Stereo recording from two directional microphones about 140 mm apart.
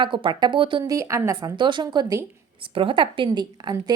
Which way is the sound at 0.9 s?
20° right (ahead or behind).